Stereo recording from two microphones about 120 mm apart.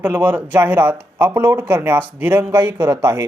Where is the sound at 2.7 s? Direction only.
30° right (ahead or behind).